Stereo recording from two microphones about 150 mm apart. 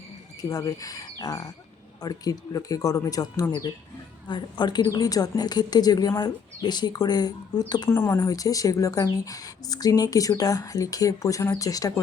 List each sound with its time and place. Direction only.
0.5 s speech: 25° left (ahead or behind)